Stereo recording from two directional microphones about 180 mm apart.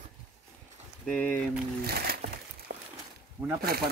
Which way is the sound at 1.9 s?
55° right (ahead or behind).